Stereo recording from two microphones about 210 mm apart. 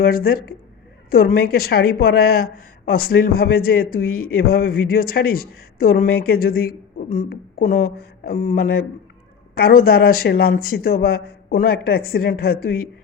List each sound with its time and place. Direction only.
0.0 s speech: 45° left (ahead or behind)